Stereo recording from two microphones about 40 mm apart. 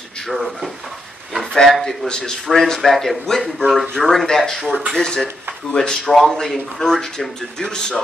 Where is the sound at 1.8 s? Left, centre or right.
Centre.